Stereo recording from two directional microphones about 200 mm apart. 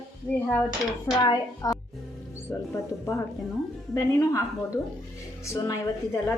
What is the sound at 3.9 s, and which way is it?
A woman's voice, 15° left (ahead or behind).